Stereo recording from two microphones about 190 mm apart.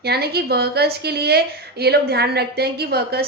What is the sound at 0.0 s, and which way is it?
A woman's voice, 55° right (ahead or behind).